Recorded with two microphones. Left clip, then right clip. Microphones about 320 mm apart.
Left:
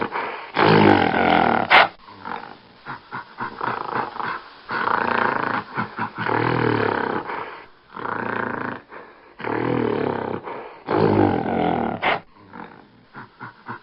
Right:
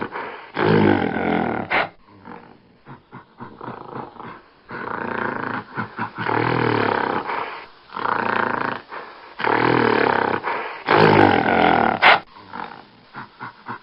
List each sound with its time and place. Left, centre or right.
0.0 s roar: centre
2.8 s dog: left; by 12.7 s right
13.1 s dog: centre